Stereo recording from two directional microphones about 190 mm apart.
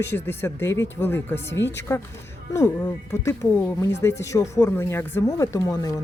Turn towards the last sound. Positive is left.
turn(degrees=20)  # may be behind; listen again after turning